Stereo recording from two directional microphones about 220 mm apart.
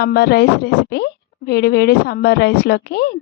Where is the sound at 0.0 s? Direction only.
45° left (ahead or behind).